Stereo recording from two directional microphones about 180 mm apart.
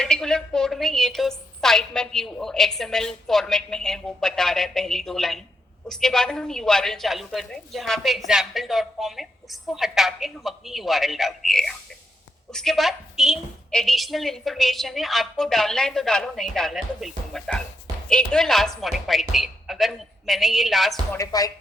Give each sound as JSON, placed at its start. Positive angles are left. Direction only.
{"t": 0.0, "sound": "a woman's voice", "side_deg": 5}
{"t": 21.1, "sound": "speech", "side_deg": 20}